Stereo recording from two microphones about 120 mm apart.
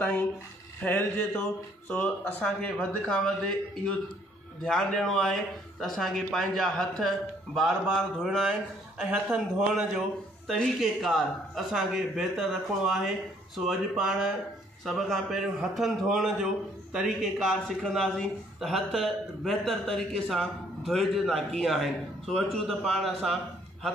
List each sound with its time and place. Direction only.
0.8 s a man's voice: 15° left (ahead or behind)